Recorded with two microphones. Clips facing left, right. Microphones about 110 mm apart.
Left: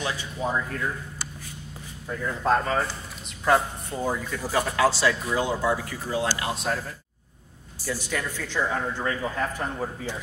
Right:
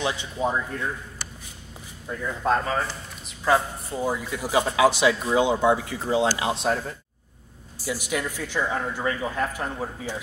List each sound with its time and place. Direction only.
0.0 s speech: 20° right (ahead or behind)
2.0 s speech: centre (ahead or behind)
3.9 s speech: 5° right (ahead or behind); by 6.7 s 25° right (ahead or behind)
7.8 s speech: 10° right (ahead or behind)